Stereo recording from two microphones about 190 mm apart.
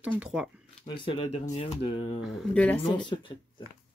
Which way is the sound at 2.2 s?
5° left (ahead or behind).